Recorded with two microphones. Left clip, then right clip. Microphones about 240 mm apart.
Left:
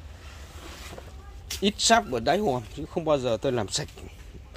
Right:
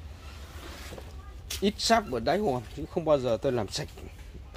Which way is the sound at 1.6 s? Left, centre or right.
Centre.